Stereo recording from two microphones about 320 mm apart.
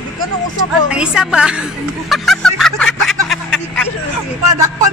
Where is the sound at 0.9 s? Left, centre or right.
Centre.